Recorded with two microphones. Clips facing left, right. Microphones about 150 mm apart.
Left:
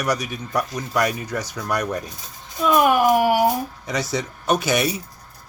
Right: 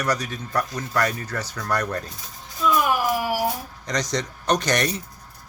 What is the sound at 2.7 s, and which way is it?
Speech, 60° left (ahead or behind).